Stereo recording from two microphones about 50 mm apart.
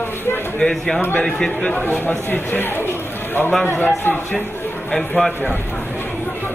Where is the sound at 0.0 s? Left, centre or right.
Left.